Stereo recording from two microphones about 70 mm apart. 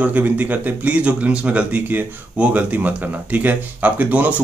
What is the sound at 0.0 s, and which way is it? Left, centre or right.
Speech, right.